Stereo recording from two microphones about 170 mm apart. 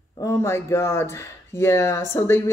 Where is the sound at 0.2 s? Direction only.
15° left (ahead or behind).